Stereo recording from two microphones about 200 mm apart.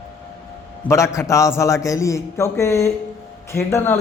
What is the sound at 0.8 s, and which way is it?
A man's voice, 15° left (ahead or behind).